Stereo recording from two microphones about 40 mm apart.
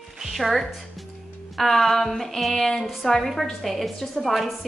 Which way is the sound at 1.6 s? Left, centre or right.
Centre.